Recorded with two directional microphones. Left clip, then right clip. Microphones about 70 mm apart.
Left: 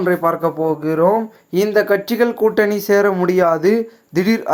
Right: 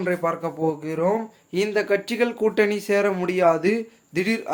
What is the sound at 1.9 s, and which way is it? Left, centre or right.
A man's voice, left.